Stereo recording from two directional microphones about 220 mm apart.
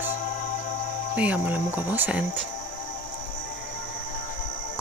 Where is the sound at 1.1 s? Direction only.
5° right (ahead or behind).